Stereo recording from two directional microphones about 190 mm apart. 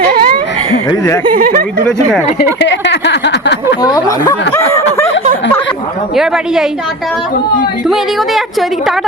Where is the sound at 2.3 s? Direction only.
65° left (ahead or behind).